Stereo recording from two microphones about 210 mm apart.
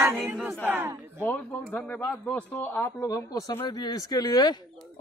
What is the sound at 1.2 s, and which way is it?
Speech, 5° left (ahead or behind).